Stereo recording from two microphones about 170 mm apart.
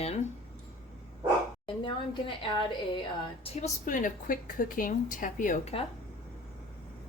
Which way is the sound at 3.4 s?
40° left (ahead or behind).